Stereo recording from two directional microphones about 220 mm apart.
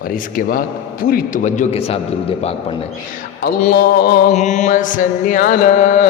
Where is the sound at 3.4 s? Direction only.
45° left (ahead or behind).